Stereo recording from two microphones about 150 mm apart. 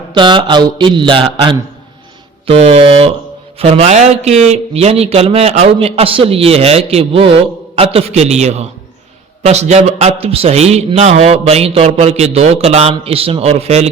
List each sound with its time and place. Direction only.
0.1 s mantra: 30° right (ahead or behind)
3.6 s a man's voice: 45° right (ahead or behind)